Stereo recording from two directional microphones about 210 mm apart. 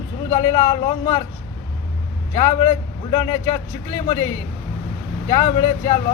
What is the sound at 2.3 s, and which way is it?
Speech, 25° left (ahead or behind).